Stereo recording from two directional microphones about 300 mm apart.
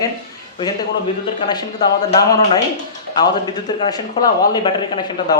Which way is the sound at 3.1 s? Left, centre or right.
Centre.